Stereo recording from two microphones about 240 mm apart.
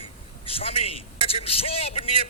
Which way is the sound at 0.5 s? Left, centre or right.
Left.